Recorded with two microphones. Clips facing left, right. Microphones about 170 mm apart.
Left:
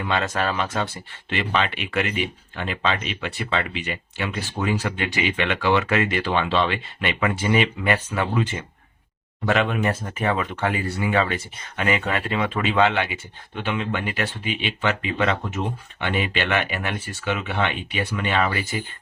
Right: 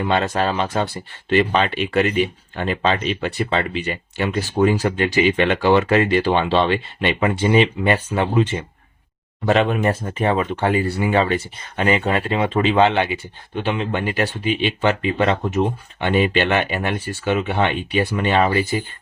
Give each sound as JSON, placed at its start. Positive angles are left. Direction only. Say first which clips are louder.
{"t": 0.0, "sound": "speech", "louder": "right 5 dB", "side_deg": -35}